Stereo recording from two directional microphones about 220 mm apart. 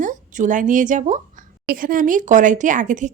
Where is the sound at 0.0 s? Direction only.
35° right (ahead or behind).